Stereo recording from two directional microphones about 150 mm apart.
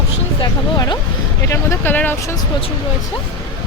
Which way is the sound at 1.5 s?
15° left (ahead or behind).